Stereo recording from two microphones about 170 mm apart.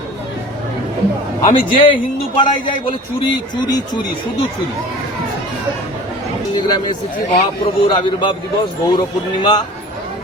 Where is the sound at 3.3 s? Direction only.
25° left (ahead or behind).